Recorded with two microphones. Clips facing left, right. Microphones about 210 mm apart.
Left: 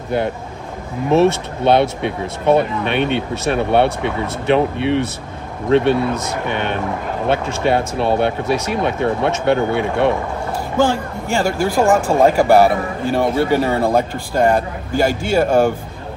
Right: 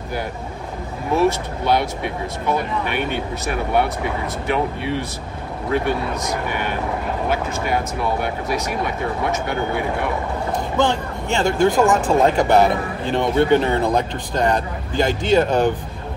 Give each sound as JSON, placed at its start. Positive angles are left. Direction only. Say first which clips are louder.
{"t": 1.1, "sound": "speech", "louder": "left 4 dB", "side_deg": 25}
{"t": 10.8, "sound": "speech", "louder": "left 4 dB", "side_deg": 10}